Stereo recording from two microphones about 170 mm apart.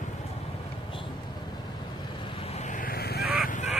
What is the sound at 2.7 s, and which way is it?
Vehicle, 60° left (ahead or behind).